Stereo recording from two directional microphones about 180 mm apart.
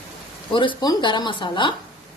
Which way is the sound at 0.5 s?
25° left (ahead or behind).